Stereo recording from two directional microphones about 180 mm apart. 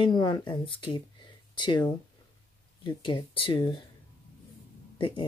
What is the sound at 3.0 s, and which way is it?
Speech, 30° left (ahead or behind).